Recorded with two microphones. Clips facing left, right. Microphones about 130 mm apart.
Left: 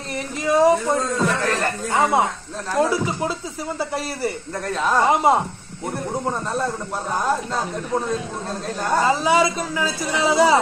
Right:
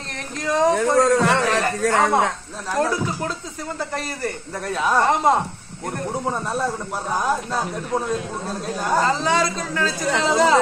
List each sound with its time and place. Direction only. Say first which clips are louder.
0.4 s speech: left 3 dB; 10° left (ahead or behind)
0.7 s a man's voice: right 5 dB; 80° right
2.7 s speech: left 2 dB; 5° left (ahead or behind)
4.7 s speech: even; 5° right (ahead or behind)
5.0 s speech: left 2 dB; 10° left (ahead or behind)
6.2 s speech: right 1 dB; 5° right (ahead or behind)
9.0 s speech: left 6 dB; 10° left (ahead or behind)